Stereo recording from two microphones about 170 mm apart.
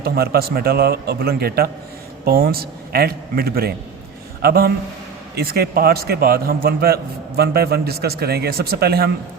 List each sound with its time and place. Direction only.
0.0 s a man's voice: 65° right (ahead or behind)